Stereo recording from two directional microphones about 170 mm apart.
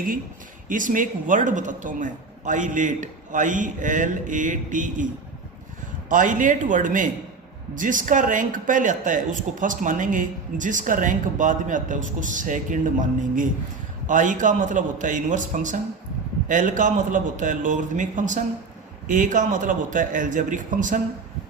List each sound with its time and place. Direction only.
0.7 s a man's voice: 50° right (ahead or behind)
6.1 s a man's voice: 50° right (ahead or behind)